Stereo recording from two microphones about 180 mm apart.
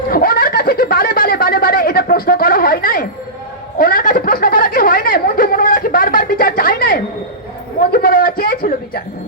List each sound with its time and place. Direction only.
0.1 s snicker: 55° left (ahead or behind)
3.8 s a sound: 50° left (ahead or behind)
7.8 s bleat: 55° left (ahead or behind)